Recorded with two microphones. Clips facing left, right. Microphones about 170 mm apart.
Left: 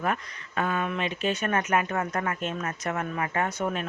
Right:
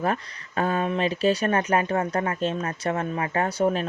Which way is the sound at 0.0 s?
35° right (ahead or behind).